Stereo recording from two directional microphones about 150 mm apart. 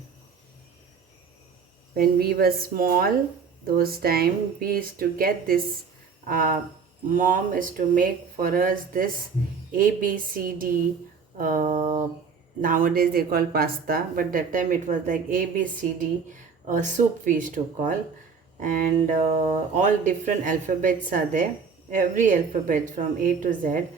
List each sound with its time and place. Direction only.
2.0 s speech: 90° right; by 23.5 s 60° right (ahead or behind)